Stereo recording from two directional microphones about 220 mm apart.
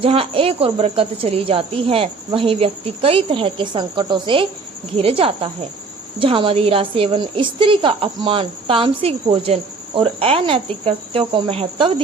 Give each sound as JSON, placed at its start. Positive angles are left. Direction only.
{"t": 0.0, "sound": "a woman's voice", "side_deg": -25}